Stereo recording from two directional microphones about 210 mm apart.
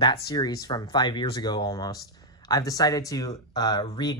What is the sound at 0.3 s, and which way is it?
Speech, 20° left (ahead or behind).